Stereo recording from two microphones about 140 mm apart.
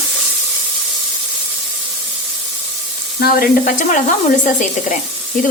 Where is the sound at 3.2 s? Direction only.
90° left.